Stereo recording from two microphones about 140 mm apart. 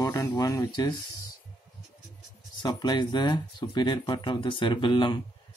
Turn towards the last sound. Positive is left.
turn(degrees=35)  # may be behind; listen again after turning